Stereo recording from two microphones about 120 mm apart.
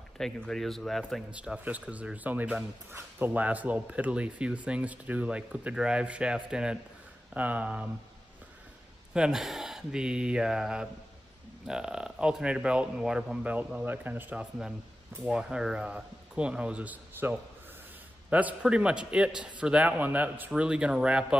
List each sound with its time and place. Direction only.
0.2 s speech: 5° left (ahead or behind)
1.3 s speech: 10° right (ahead or behind)
9.1 s speech: 5° right (ahead or behind)